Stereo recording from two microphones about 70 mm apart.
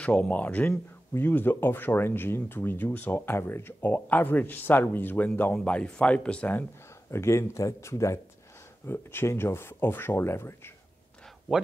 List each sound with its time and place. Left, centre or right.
0.0 s speech: centre
7.1 s speech: left